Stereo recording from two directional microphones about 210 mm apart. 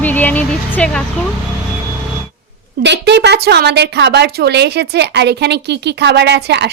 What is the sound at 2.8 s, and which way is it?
A woman's voice, 55° right (ahead or behind).